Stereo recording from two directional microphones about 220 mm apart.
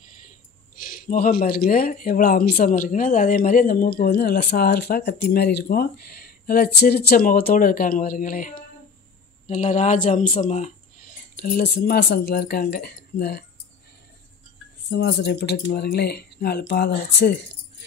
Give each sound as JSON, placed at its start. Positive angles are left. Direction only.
{"t": 0.7, "sound": "speech", "side_deg": 40}
{"t": 14.9, "sound": "speech", "side_deg": 50}